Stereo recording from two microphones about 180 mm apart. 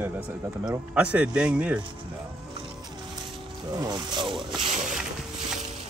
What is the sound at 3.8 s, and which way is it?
Speech, 25° right (ahead or behind).